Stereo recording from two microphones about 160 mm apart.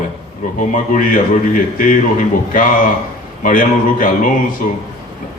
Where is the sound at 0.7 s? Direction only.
55° left (ahead or behind).